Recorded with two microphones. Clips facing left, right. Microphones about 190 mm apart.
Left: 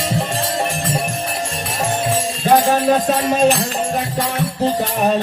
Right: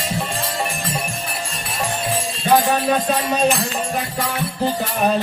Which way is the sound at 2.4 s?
45° left (ahead or behind).